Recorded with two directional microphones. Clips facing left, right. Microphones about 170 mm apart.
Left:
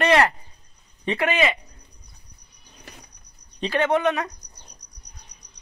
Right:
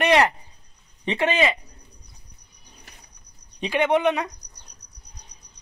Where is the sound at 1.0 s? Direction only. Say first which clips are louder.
Right 1 dB; 20° right (ahead or behind).